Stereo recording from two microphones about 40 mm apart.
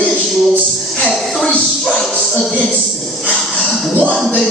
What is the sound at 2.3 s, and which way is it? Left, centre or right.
Speech, centre.